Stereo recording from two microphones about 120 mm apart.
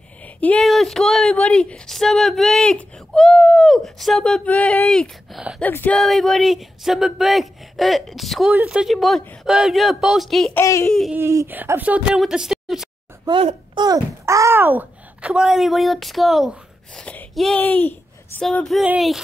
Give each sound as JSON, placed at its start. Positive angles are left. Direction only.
{"t": 0.4, "sound": "speech", "side_deg": 10}
{"t": 0.7, "sound": "speech", "side_deg": 0}
{"t": 5.9, "sound": "speech", "side_deg": 0}
{"t": 10.5, "sound": "a child's voice", "side_deg": 25}
{"t": 11.1, "sound": "speech", "side_deg": -20}
{"t": 12.2, "sound": "a sound", "side_deg": -5}
{"t": 13.7, "sound": "a child's voice", "side_deg": -35}
{"t": 17.0, "sound": "a sound", "side_deg": 5}
{"t": 17.6, "sound": "speech", "side_deg": 15}